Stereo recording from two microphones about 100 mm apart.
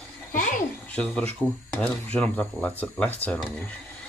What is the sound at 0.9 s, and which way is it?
Speech, 10° left (ahead or behind).